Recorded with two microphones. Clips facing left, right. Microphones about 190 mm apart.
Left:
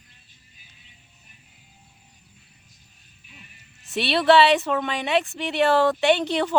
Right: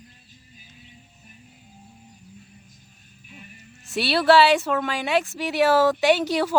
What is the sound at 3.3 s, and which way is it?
Music, 45° right (ahead or behind).